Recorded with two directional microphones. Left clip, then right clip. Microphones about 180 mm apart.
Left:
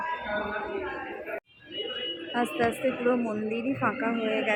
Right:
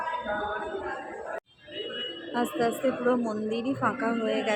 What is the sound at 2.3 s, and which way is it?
A woman's voice, centre (ahead or behind).